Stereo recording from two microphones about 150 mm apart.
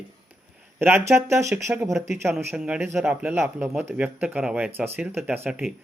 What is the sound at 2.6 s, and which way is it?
A man's voice, 5° right (ahead or behind).